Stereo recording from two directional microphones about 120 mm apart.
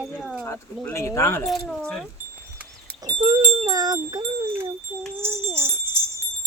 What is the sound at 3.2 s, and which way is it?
Speech, 50° right (ahead or behind).